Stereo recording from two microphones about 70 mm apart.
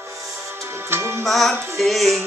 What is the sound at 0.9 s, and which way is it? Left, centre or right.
Music, right.